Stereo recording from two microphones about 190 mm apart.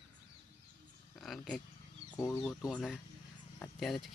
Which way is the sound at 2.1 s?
15° left (ahead or behind).